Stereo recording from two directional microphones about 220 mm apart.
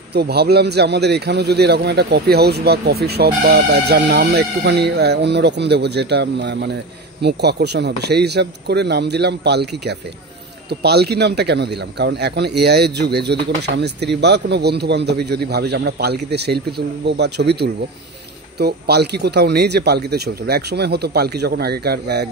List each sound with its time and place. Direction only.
0.1 s speech: 45° right (ahead or behind)